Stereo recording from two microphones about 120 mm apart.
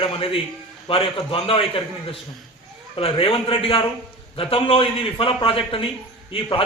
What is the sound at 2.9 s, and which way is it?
A man's voice, 50° left (ahead or behind).